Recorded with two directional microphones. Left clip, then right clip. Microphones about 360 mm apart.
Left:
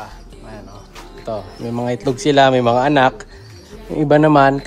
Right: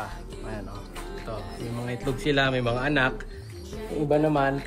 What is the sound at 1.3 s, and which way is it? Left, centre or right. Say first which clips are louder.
Speech: left 14 dB; centre.